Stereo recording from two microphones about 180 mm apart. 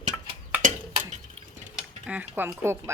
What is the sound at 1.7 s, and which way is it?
Speech, 5° right (ahead or behind).